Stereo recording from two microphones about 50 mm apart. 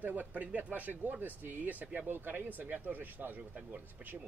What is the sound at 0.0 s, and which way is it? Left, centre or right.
Speech, right.